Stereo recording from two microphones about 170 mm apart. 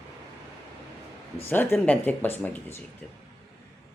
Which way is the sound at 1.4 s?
15° left (ahead or behind).